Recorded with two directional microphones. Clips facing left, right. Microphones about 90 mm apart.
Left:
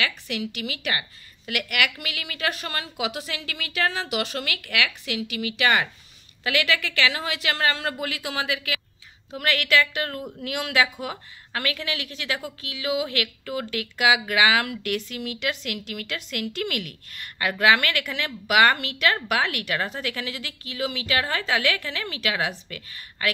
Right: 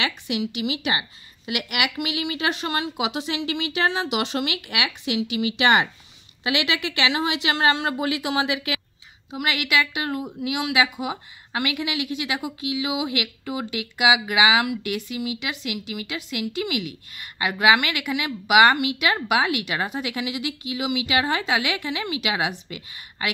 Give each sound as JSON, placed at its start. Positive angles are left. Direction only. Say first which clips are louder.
{"t": 0.0, "sound": "a woman's voice", "louder": "right 2 dB", "side_deg": -20}